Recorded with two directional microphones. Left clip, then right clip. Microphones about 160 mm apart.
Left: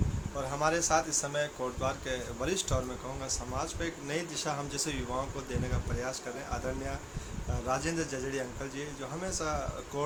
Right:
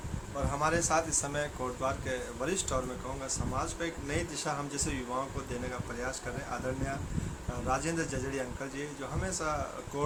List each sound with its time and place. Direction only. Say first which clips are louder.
0.6 s speech: left 1 dB; 10° left (ahead or behind)
1.8 s speech: right 1 dB; 20° left (ahead or behind)
6.0 s speech: left 1 dB; 15° left (ahead or behind)
7.7 s speech: even; 15° left (ahead or behind)